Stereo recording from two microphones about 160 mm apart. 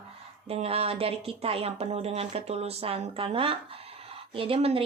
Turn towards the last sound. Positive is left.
turn(degrees=-35)  # may be behind; listen again after turning